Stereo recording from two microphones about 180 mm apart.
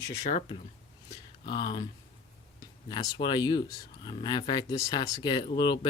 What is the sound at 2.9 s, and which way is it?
Speech, 25° left (ahead or behind).